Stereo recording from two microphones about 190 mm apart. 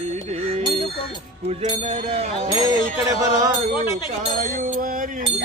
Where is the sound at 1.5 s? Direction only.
35° right (ahead or behind).